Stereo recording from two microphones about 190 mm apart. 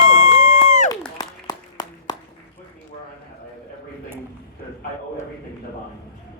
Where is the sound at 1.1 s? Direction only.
20° left (ahead or behind).